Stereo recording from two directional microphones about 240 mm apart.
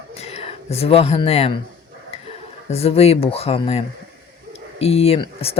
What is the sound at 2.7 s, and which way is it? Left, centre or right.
Speech, left.